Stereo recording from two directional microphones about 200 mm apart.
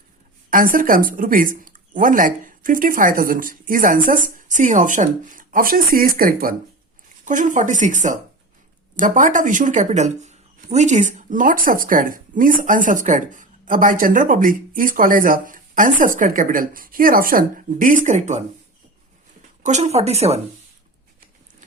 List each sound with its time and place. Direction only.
0.5 s speech: 45° right (ahead or behind)
19.6 s speech: 35° right (ahead or behind)